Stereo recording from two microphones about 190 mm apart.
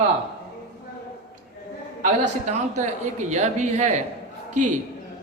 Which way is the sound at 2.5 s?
40° right (ahead or behind).